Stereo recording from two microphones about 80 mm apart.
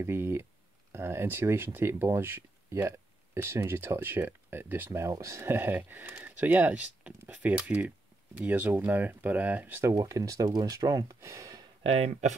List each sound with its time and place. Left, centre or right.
0.0 s speech: right
5.1 s speech: right; by 9.8 s centre
9.9 s speech: right
11.1 s a sound: right